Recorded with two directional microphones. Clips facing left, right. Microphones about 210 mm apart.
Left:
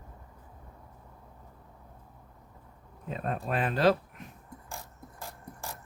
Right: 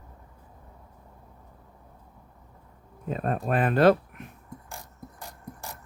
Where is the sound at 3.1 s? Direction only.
50° right (ahead or behind).